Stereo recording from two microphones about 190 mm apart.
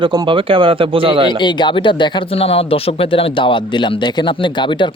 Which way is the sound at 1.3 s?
25° left (ahead or behind).